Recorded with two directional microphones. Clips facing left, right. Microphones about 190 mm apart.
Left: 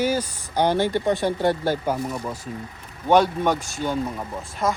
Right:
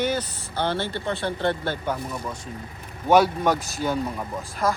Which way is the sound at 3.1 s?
10° right (ahead or behind).